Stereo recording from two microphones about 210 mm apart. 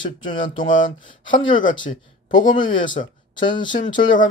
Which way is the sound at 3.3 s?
20° left (ahead or behind).